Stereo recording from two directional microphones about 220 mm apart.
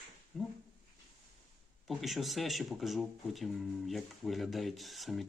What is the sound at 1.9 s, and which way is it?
Speech, centre (ahead or behind).